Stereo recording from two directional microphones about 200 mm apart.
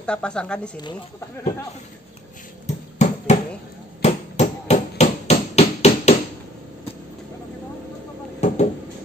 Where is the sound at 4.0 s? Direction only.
35° left (ahead or behind).